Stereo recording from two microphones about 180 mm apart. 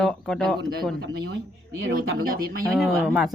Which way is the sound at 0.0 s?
5° left (ahead or behind).